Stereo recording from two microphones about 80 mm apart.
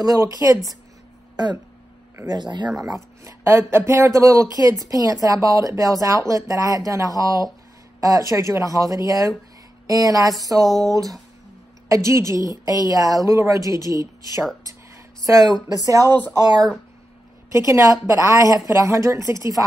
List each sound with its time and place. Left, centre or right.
0.0 s speech: right
1.3 s speech: right
2.8 s a woman's voice: right
14.7 s a sound: right
15.8 s speech: right
17.5 s a woman's voice: right